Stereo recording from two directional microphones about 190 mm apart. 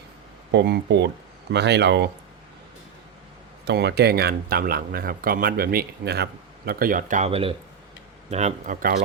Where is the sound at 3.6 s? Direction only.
60° right (ahead or behind).